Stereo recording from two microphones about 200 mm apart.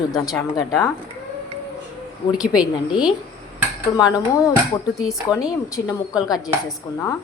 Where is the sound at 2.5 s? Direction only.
5° right (ahead or behind).